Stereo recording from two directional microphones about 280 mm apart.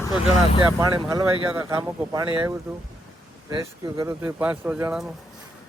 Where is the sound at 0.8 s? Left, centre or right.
Centre.